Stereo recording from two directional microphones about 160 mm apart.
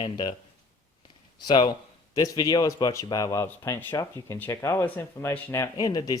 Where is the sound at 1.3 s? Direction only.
30° left (ahead or behind).